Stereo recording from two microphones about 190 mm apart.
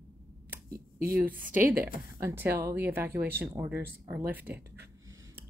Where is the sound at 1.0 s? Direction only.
50° right (ahead or behind).